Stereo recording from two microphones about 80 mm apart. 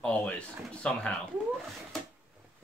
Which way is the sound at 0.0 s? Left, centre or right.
Centre.